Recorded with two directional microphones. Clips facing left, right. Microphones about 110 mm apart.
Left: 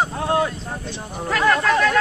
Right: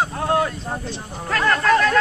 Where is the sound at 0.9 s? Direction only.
10° left (ahead or behind).